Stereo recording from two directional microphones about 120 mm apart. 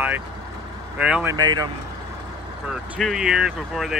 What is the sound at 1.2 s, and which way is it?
Speech, 35° right (ahead or behind).